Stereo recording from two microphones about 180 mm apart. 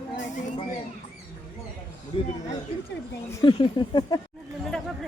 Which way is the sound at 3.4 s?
25° left (ahead or behind).